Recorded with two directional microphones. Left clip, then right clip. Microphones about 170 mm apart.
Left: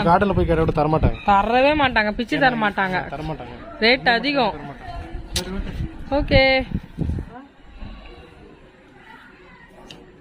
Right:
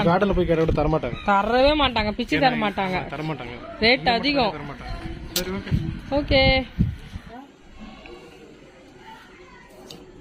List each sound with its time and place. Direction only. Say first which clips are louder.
0.0 s speech: left 3 dB; 35° left (ahead or behind)
1.2 s a woman's voice: left 2 dB; centre (ahead or behind)